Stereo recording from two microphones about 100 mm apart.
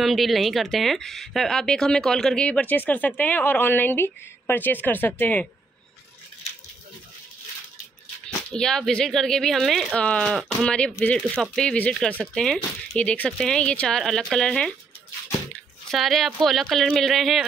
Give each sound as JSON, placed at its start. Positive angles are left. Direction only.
{"t": 0.0, "sound": "speech", "side_deg": 0}
{"t": 8.5, "sound": "speech", "side_deg": 5}
{"t": 15.9, "sound": "speech", "side_deg": 0}